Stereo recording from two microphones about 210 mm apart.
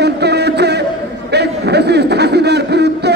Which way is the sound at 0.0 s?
55° right (ahead or behind).